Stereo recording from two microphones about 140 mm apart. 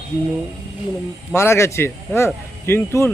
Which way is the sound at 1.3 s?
20° left (ahead or behind).